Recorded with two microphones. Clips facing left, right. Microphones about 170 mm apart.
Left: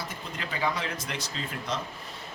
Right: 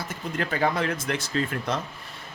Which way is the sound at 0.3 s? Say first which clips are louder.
Right 6 dB; 55° right (ahead or behind).